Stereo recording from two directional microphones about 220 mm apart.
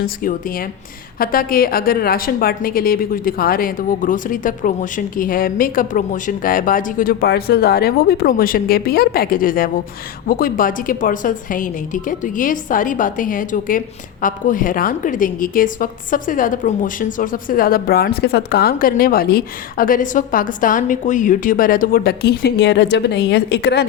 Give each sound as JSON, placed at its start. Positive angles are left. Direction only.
{"t": 1.2, "sound": "a woman's voice", "side_deg": 40}